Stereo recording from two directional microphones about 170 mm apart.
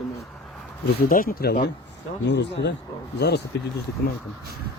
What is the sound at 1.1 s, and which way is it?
Speech, 55° left (ahead or behind).